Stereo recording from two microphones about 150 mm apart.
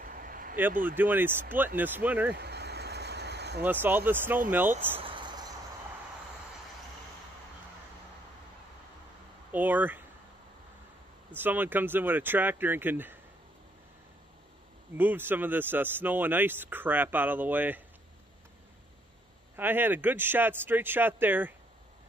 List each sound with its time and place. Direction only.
0.0 s a sound: 65° right (ahead or behind)
0.8 s speech: 10° right (ahead or behind)
2.3 s a sound: 90° right
3.6 s speech: 15° right (ahead or behind)
5.0 s a sound: 30° right (ahead or behind)
9.5 s speech: 10° right (ahead or behind)
11.3 s speech: 10° right (ahead or behind)
15.0 s speech: 15° right (ahead or behind)
19.5 s speech: 15° right (ahead or behind)